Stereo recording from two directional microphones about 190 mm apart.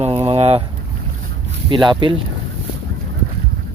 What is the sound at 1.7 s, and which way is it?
Speech, 25° right (ahead or behind).